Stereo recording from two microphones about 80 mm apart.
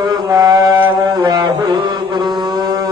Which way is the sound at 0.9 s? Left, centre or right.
Right.